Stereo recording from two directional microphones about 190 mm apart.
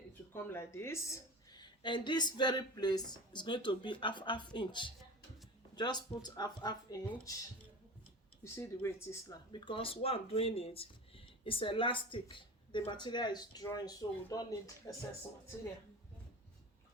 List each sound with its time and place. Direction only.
0.1 s speech: 10° left (ahead or behind)
8.5 s speech: 10° left (ahead or behind)